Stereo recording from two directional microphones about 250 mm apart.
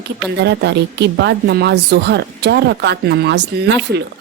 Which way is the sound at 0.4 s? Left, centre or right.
Right.